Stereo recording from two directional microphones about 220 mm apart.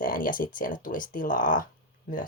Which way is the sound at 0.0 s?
40° left (ahead or behind).